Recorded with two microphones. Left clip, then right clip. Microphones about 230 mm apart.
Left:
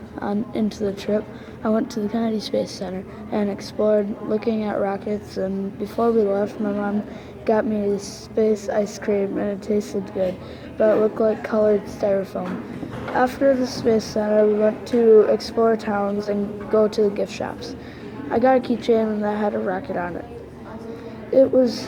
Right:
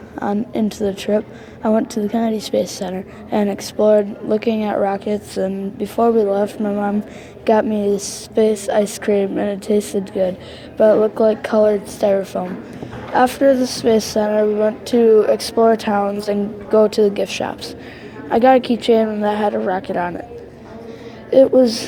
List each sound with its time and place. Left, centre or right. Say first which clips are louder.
0.2 s a woman's voice: right 4 dB; right
21.2 s a woman's voice: right 5 dB; right